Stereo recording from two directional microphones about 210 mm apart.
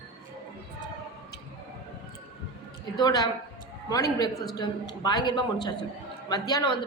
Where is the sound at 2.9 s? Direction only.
20° left (ahead or behind).